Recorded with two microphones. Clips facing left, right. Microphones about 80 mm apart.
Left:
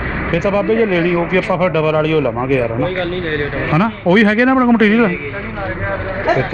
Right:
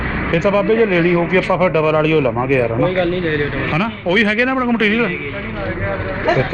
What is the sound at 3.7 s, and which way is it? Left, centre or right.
A man's voice, left.